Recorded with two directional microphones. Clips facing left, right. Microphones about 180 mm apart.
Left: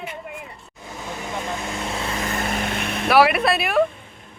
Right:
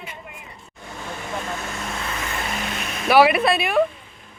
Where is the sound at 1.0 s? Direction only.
15° left (ahead or behind).